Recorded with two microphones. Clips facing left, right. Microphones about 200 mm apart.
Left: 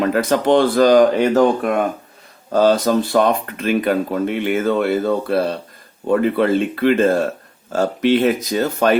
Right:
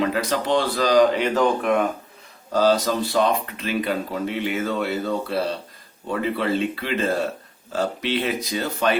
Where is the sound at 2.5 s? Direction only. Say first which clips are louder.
Left 5 dB; 55° left (ahead or behind).